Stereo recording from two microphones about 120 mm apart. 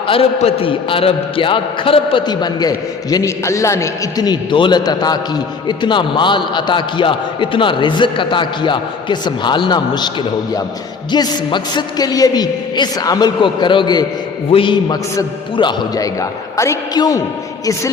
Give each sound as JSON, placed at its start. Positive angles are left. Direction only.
{"t": 0.3, "sound": "a man's voice", "side_deg": 55}
{"t": 2.2, "sound": "a man's voice", "side_deg": 35}
{"t": 11.1, "sound": "a man's voice", "side_deg": 35}